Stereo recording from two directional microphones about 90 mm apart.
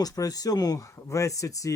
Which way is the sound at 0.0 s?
45° left (ahead or behind).